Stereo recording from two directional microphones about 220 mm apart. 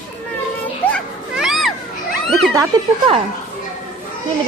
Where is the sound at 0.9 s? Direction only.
Centre (ahead or behind).